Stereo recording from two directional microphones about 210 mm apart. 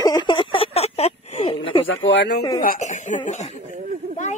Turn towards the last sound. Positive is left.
turn(degrees=-35)  # may be behind; listen again after turning